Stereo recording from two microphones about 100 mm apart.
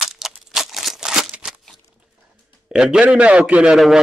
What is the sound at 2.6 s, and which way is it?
A man's voice, 5° right (ahead or behind).